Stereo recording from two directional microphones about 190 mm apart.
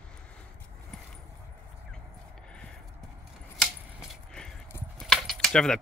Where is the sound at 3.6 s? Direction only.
Centre (ahead or behind).